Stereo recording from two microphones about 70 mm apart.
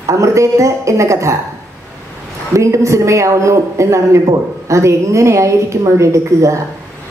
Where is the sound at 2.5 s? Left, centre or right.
Right.